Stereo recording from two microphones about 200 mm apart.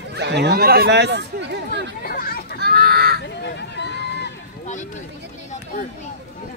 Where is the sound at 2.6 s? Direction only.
50° right (ahead or behind).